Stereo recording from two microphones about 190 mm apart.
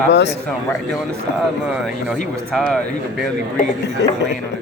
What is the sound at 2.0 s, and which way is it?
Speech, centre (ahead or behind).